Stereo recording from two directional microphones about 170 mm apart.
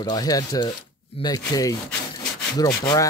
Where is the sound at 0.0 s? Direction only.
25° left (ahead or behind).